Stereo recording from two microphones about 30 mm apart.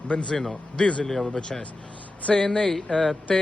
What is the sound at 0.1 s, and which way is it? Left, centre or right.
Speech, left.